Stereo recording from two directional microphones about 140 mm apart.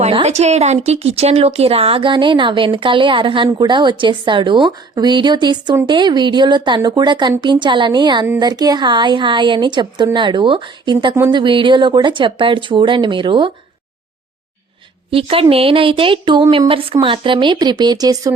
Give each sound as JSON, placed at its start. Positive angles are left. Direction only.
{"t": 0.0, "sound": "speech", "side_deg": -50}
{"t": 15.1, "sound": "speech", "side_deg": -40}